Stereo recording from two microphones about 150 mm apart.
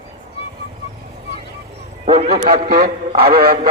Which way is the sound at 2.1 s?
45° right (ahead or behind).